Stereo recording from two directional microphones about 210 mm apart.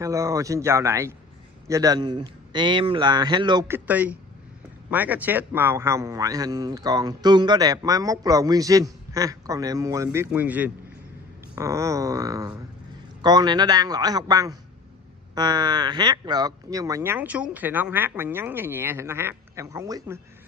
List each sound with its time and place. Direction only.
0.0 s a man's voice: 15° right (ahead or behind)